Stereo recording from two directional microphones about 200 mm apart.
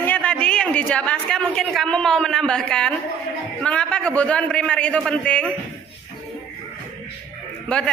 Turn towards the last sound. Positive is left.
turn(degrees=5)  # may be behind; listen again after turning